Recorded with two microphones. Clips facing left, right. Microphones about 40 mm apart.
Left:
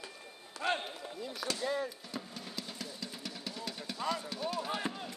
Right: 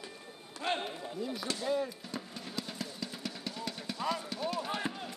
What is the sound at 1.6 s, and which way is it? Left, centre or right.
Music, centre.